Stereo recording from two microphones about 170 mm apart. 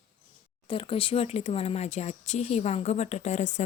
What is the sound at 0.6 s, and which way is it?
Speech, 30° left (ahead or behind).